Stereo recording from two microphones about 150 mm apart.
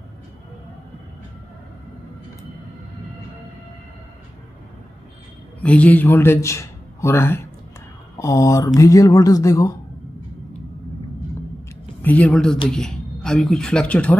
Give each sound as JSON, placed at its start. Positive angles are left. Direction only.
{"t": 5.6, "sound": "a man's voice", "side_deg": 10}
{"t": 12.0, "sound": "speech", "side_deg": 10}